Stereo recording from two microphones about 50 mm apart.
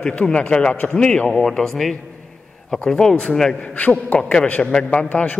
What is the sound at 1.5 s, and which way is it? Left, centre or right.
A man's voice, centre.